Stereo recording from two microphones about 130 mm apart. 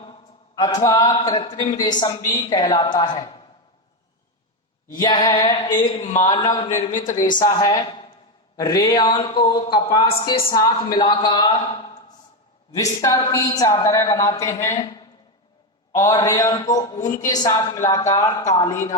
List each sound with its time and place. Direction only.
0.0 s a sound: 35° left (ahead or behind)
1.4 s a man's voice: 30° left (ahead or behind)
5.0 s a man's voice: 40° left (ahead or behind)
6.0 s speech: 70° left (ahead or behind)
6.2 s a man's voice: 35° left (ahead or behind)
6.9 s speech: 80° left
7.3 s a man's voice: 25° left (ahead or behind)
12.7 s speech: 25° left (ahead or behind)